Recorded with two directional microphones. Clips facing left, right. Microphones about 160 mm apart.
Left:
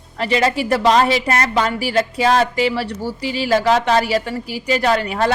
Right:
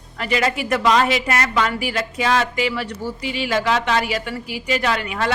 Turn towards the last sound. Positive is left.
turn(degrees=35)  # may be behind; listen again after turning